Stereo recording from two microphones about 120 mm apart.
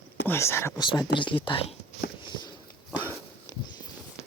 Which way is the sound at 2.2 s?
40° left (ahead or behind).